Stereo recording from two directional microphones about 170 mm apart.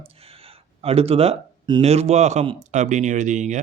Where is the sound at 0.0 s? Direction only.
35° right (ahead or behind).